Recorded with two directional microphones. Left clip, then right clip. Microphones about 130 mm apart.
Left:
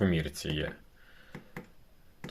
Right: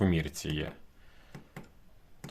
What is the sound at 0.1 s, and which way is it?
Speech, 35° right (ahead or behind).